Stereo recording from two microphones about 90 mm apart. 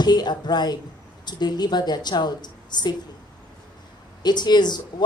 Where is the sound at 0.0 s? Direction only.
50° left (ahead or behind).